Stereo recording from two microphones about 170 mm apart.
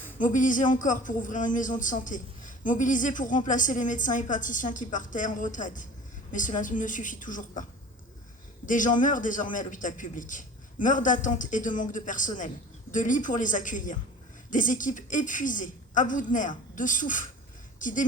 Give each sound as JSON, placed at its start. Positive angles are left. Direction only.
{"t": 0.2, "sound": "speech", "side_deg": 50}
{"t": 8.6, "sound": "speech", "side_deg": 50}